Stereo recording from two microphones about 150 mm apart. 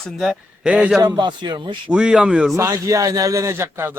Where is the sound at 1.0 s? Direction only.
30° right (ahead or behind).